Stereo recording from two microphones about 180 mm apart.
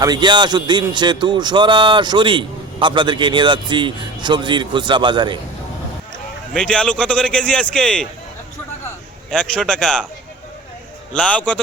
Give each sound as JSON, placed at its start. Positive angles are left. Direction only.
{"t": 0.0, "sound": "speech", "side_deg": -25}
{"t": 6.5, "sound": "speech", "side_deg": 5}
{"t": 9.3, "sound": "speech", "side_deg": 5}
{"t": 11.1, "sound": "a man's voice", "side_deg": 5}